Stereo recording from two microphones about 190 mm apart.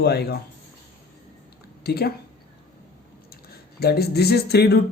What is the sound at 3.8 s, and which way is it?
Speech, 55° left (ahead or behind).